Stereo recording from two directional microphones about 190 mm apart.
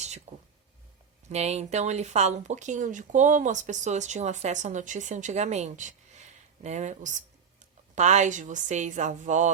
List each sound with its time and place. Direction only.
0.3 s speech: 35° right (ahead or behind)